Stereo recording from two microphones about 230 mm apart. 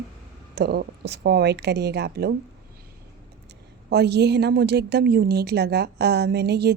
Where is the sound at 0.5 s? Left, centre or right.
Right.